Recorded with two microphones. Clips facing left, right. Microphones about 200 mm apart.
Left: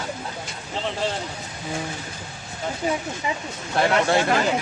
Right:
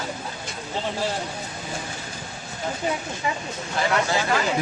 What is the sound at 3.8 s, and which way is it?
Speech, 60° left (ahead or behind).